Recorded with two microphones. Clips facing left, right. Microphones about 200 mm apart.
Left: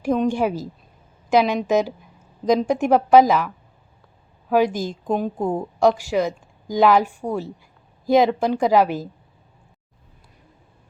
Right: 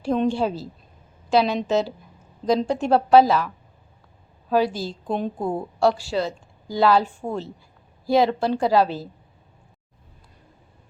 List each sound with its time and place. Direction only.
0.3 s a woman's voice: 15° left (ahead or behind)
4.4 s a woman's voice: 15° left (ahead or behind)
5.1 s a woman's voice: 5° left (ahead or behind)
5.5 s a woman's voice: 15° left (ahead or behind)